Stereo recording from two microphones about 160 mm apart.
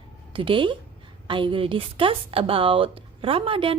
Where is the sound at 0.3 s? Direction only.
30° right (ahead or behind).